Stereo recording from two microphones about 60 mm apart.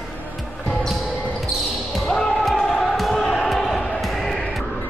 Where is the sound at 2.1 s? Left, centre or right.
Centre.